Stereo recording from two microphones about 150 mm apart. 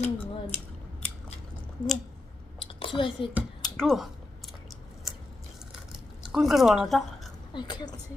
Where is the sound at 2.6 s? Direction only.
35° left (ahead or behind).